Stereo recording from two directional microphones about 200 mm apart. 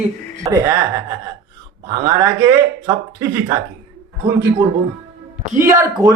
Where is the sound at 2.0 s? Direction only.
15° right (ahead or behind).